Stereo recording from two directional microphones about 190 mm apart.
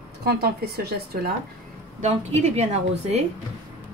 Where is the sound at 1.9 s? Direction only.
35° right (ahead or behind).